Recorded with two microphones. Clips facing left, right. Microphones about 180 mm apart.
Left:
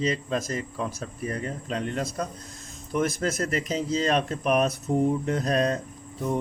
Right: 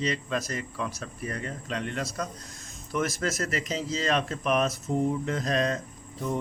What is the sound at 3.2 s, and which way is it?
Speech, 35° left (ahead or behind).